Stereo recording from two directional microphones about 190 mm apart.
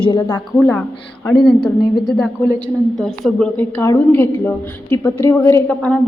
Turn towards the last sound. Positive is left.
turn(degrees=5)  # may be behind; listen again after turning